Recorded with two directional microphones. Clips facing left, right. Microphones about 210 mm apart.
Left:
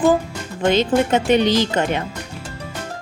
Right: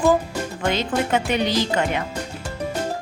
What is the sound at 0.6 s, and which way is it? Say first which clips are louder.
Speech: left 7 dB; 25° left (ahead or behind).